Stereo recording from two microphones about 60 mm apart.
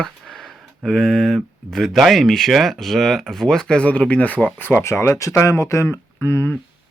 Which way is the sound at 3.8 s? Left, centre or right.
Left.